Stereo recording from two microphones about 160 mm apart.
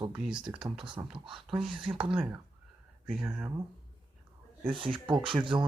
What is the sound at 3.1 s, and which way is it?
Speech, 5° right (ahead or behind).